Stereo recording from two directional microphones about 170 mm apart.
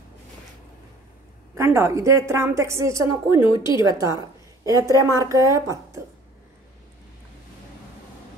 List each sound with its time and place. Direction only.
1.5 s a woman's voice: 15° right (ahead or behind)